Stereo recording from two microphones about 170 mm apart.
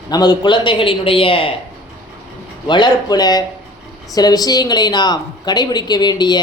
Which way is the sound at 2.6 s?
25° left (ahead or behind).